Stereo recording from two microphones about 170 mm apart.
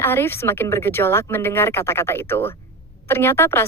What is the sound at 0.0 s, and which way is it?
A woman's voice, 15° left (ahead or behind).